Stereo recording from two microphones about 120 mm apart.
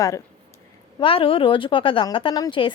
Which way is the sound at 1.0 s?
50° left (ahead or behind).